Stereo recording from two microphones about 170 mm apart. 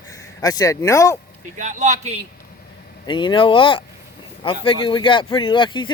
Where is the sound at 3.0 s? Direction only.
25° left (ahead or behind).